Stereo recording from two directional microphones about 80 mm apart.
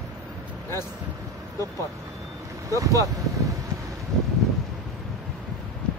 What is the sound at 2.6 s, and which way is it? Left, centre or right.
Speech, right.